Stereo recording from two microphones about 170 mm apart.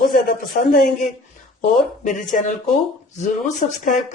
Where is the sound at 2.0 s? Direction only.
50° left (ahead or behind).